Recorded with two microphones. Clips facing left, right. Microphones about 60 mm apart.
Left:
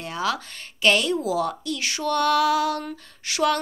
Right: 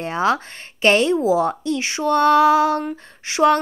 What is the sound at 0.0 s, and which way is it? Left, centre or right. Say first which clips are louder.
A woman's voice: right 7 dB; right.